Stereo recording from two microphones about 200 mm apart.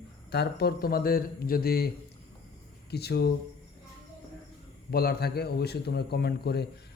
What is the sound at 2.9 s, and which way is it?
Speech, 55° left (ahead or behind).